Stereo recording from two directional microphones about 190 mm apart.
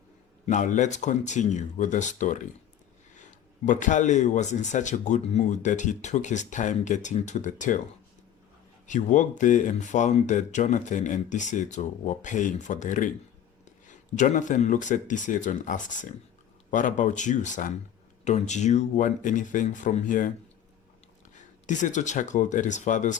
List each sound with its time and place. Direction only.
0.4 s speech: 40° left (ahead or behind)
3.7 s speech: 40° left (ahead or behind)
8.9 s speech: 40° left (ahead or behind)
21.3 s speech: 40° left (ahead or behind)